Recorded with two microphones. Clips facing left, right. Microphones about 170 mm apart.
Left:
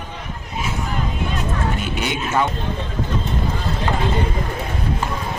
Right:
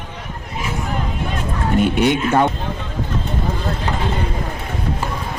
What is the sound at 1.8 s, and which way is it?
Speech, 60° right (ahead or behind).